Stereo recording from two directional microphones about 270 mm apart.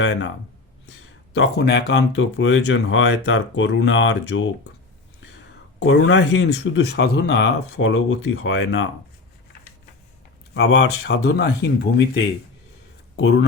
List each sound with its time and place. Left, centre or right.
0.0 s speech: left
5.8 s speech: left
10.5 s speech: left